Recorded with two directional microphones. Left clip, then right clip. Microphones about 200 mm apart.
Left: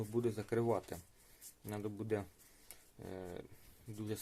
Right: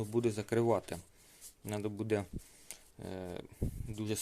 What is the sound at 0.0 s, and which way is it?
Speech, 30° right (ahead or behind).